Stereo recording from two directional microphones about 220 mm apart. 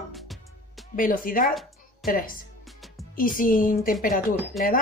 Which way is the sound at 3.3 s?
40° left (ahead or behind).